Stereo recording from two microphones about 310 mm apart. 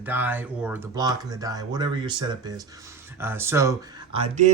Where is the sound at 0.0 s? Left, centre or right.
Centre.